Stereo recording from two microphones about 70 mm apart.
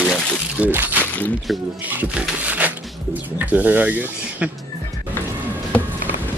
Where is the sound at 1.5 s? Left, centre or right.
Centre.